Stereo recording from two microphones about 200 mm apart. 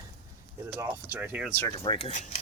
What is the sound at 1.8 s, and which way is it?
Speech, 30° left (ahead or behind).